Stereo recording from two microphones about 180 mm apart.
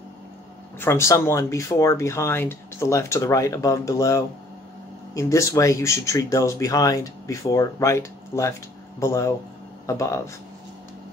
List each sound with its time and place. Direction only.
0.7 s speech: 15° left (ahead or behind)